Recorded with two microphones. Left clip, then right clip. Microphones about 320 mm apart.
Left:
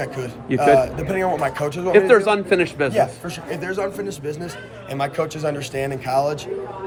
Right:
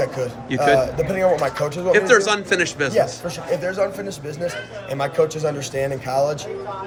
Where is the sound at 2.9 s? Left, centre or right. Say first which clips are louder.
Even; centre.